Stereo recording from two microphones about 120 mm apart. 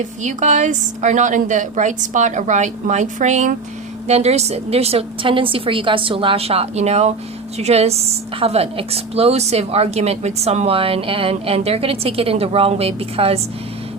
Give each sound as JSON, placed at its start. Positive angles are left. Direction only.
{"t": 0.0, "sound": "a woman's voice", "side_deg": -90}
{"t": 4.0, "sound": "a woman's voice", "side_deg": -65}